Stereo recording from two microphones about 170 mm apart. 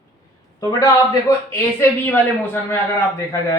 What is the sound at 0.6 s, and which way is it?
A man's voice, 20° left (ahead or behind).